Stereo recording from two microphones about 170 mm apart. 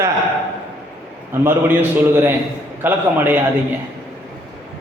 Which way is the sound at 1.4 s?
10° right (ahead or behind).